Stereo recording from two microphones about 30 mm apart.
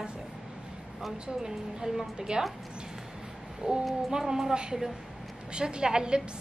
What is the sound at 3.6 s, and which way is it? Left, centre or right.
Speech, right.